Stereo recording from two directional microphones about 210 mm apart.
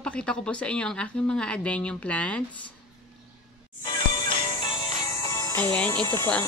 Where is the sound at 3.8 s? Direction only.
20° left (ahead or behind).